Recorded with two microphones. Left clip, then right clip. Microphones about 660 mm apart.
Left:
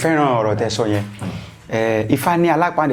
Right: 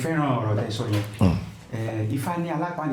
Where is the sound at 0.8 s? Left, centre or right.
Left.